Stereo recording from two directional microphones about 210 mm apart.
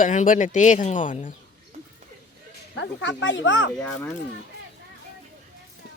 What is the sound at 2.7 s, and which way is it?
Speech, 60° left (ahead or behind).